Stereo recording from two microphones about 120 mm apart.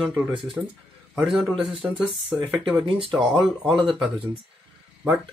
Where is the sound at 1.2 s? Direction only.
5° right (ahead or behind).